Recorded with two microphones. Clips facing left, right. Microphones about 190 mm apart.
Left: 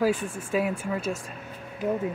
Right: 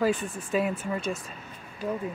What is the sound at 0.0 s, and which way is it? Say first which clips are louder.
Speech: left 1 dB; 5° left (ahead or behind).